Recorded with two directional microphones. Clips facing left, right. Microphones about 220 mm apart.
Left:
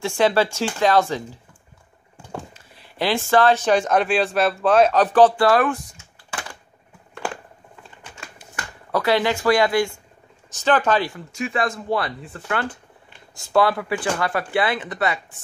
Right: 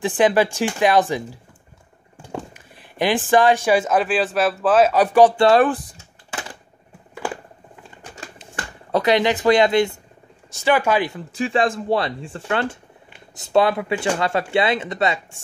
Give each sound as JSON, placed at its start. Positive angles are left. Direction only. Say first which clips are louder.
{"t": 0.0, "sound": "speech", "louder": "right 2 dB", "side_deg": -15}
{"t": 2.5, "sound": "speech", "louder": "right 3 dB", "side_deg": -15}
{"t": 5.4, "sound": "typing", "louder": "right 3 dB", "side_deg": -25}
{"t": 8.4, "sound": "speech", "louder": "right 2 dB", "side_deg": -20}
{"t": 10.5, "sound": "speech", "louder": "right 1 dB", "side_deg": -10}
{"t": 11.3, "sound": "speech", "louder": "right 4 dB", "side_deg": -30}